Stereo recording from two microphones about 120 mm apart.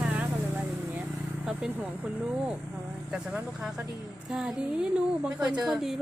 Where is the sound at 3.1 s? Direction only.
5° right (ahead or behind).